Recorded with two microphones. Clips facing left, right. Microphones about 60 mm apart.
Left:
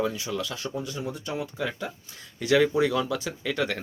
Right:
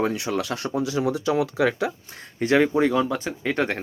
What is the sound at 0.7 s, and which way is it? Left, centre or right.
Speech, right.